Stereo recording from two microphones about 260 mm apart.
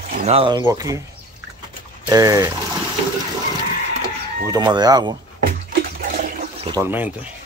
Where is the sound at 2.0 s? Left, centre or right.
Centre.